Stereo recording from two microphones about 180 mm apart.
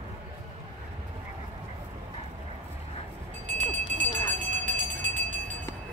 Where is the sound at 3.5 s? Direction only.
40° right (ahead or behind).